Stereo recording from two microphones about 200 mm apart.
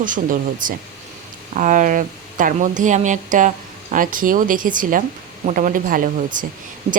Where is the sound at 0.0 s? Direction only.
40° right (ahead or behind).